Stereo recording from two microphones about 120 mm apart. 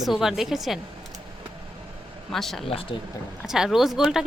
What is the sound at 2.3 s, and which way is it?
Speech, centre (ahead or behind).